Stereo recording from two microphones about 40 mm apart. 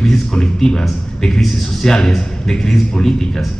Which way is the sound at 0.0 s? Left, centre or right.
Centre.